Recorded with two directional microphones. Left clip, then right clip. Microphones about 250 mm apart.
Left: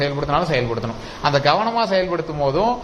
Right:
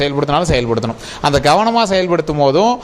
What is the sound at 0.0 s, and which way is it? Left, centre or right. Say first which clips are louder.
A man's voice: right 5 dB; right.